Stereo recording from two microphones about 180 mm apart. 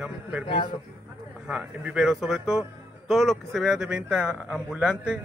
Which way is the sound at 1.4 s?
5° right (ahead or behind).